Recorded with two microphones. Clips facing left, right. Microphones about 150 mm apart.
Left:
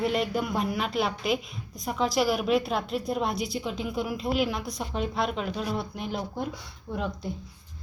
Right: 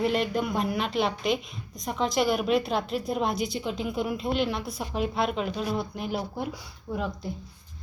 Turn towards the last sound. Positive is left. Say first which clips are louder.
# even
turn(degrees=0)  # may be behind; listen again after turning